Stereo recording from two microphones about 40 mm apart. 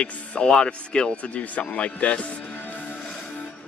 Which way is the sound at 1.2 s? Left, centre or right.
Left.